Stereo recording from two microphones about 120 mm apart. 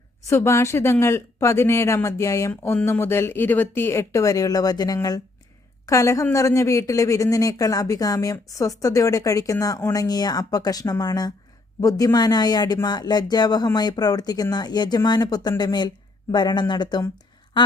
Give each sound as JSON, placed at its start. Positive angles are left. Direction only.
{"t": 0.3, "sound": "a woman's voice", "side_deg": 25}